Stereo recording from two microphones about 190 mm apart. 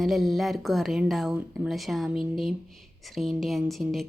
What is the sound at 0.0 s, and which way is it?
A woman's voice, centre (ahead or behind).